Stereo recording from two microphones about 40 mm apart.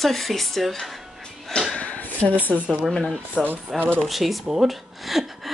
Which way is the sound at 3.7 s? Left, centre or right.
Right.